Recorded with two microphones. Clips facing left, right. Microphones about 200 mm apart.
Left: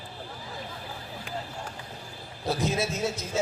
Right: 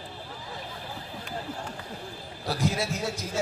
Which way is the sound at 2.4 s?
20° left (ahead or behind).